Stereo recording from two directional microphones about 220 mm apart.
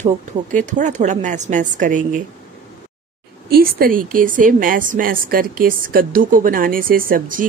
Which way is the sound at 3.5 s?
40° right (ahead or behind).